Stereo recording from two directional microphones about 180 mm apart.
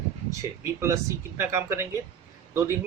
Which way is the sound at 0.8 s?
15° right (ahead or behind).